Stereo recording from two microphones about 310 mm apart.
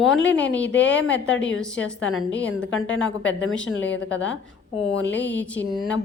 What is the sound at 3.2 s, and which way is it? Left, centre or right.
Speech, left.